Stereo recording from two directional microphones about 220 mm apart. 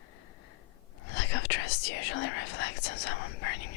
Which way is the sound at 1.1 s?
55° left (ahead or behind).